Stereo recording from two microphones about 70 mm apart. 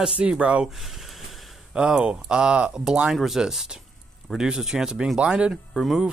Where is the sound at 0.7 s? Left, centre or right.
Centre.